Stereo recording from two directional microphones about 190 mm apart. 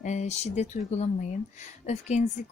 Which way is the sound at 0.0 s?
40° left (ahead or behind).